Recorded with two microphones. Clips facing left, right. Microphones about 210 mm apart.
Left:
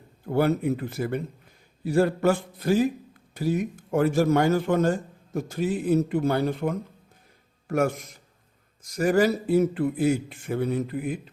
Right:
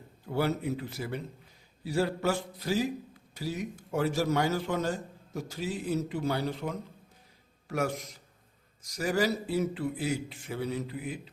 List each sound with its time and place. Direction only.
0.3 s a man's voice: 55° left (ahead or behind)